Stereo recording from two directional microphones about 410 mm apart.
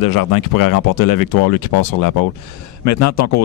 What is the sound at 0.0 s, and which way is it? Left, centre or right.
Speech, left.